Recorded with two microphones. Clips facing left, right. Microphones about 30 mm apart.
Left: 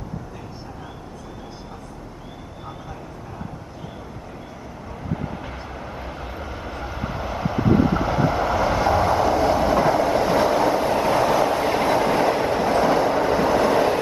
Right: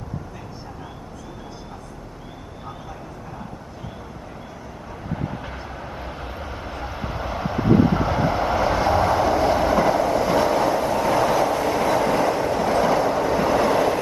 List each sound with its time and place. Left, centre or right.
5.1 s vehicle: centre
10.2 s train: centre
11.4 s train: left
12.6 s train: centre